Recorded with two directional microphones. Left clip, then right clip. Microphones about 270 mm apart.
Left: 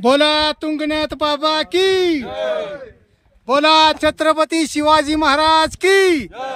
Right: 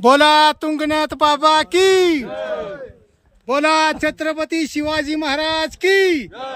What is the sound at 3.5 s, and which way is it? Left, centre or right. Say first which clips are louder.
Speech: left 3 dB; centre.